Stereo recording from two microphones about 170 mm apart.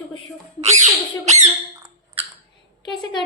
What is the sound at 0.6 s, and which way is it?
Squawk, 40° right (ahead or behind).